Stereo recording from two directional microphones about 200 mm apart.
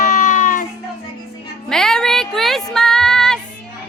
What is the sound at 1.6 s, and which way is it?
Music, 5° left (ahead or behind).